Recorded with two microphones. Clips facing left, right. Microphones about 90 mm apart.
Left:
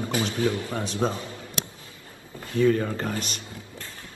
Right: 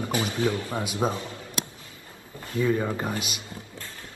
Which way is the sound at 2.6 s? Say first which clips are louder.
Left 3 dB; 20° right (ahead or behind).